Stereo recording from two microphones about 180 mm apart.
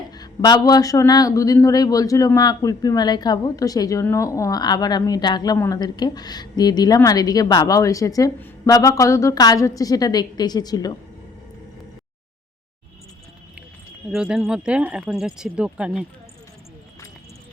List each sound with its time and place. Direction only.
0.1 s speech: 20° left (ahead or behind)
14.1 s speech: 5° right (ahead or behind)